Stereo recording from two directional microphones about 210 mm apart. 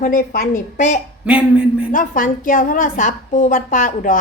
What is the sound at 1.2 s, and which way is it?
Speech, 5° right (ahead or behind).